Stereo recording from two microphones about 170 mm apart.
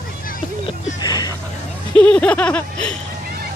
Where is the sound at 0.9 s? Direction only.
20° left (ahead or behind).